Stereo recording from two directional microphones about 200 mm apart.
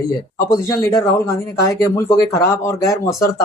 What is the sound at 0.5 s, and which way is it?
Speech, 15° left (ahead or behind).